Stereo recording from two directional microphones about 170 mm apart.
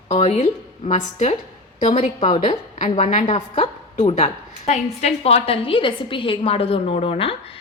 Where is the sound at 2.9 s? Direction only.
45° left (ahead or behind).